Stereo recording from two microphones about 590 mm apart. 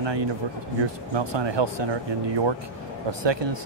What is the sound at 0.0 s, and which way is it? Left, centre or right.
Speech, right.